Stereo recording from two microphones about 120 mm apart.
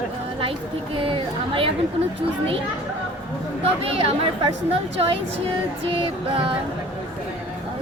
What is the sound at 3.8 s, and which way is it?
Speech, 50° right (ahead or behind).